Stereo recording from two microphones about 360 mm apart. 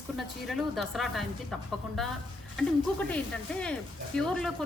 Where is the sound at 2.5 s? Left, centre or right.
Centre.